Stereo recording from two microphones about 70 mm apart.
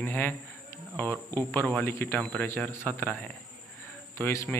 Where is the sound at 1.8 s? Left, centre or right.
Left.